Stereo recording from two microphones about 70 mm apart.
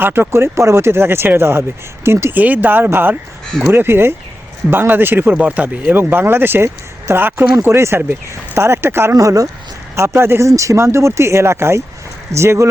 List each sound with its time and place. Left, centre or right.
0.0 s speech: right
2.3 s speech: right
9.1 s speech: right
9.9 s speech: right